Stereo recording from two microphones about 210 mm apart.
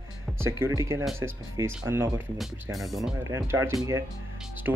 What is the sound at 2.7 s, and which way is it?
Speech, centre (ahead or behind).